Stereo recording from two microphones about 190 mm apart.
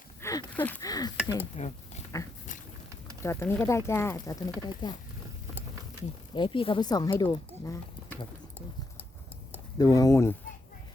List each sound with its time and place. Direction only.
0.2 s a sound: 15° left (ahead or behind)
0.9 s speech: 20° left (ahead or behind)
1.5 s speech: 35° left (ahead or behind)
3.2 s speech: 15° left (ahead or behind)
6.3 s speech: 25° left (ahead or behind)
9.7 s speech: 15° left (ahead or behind)